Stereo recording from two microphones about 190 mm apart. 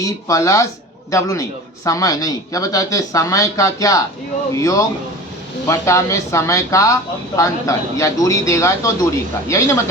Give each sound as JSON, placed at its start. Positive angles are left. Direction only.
{"t": 0.0, "sound": "a man's voice", "side_deg": 15}